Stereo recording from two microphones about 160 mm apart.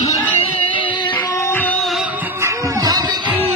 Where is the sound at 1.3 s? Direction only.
15° left (ahead or behind).